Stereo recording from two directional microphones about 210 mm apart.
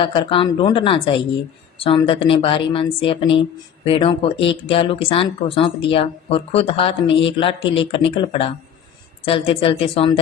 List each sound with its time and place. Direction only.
0.0 s speech: 25° left (ahead or behind)